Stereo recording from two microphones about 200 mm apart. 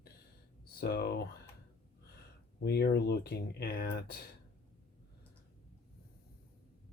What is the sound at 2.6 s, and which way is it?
Speech, 55° left (ahead or behind).